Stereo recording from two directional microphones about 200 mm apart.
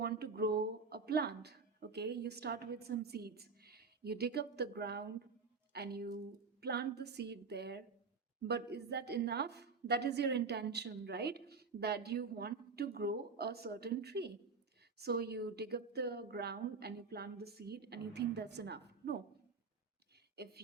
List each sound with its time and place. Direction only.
0.0 s a woman's voice: 50° right (ahead or behind)
20.3 s speech: 55° right (ahead or behind)